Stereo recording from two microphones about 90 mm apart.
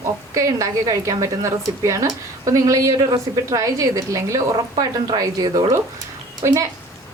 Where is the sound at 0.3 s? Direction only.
40° right (ahead or behind).